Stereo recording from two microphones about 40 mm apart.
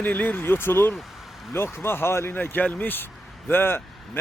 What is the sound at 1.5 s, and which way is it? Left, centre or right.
Speech, left.